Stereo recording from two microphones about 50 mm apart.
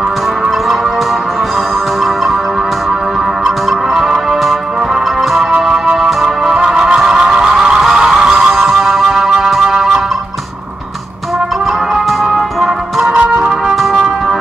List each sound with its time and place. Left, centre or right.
3.4 s music: centre
5.9 s music: centre
11.9 s music: centre
13.1 s music: right
13.7 s music: centre